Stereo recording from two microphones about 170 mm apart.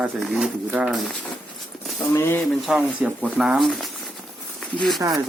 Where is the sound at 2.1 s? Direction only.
15° left (ahead or behind).